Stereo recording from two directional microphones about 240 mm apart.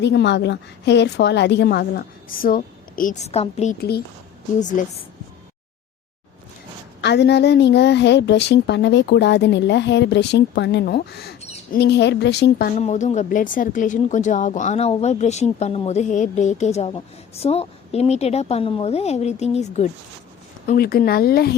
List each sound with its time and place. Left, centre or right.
0.0 s a woman's voice: left
3.8 s speech: left
7.0 s a woman's voice: left
12.8 s speech: left
20.7 s speech: left